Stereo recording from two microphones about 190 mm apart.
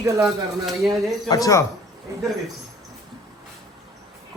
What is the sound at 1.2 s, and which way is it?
Speech, 20° left (ahead or behind).